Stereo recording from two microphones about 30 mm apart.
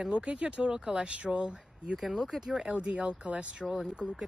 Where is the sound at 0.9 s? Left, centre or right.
Right.